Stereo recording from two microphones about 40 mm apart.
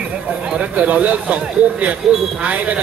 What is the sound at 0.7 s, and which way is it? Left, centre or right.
Speech, right.